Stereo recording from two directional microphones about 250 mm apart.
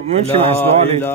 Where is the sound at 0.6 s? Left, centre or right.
Centre.